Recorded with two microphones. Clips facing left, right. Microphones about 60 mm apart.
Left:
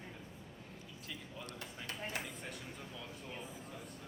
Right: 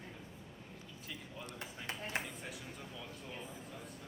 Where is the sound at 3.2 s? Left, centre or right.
Centre.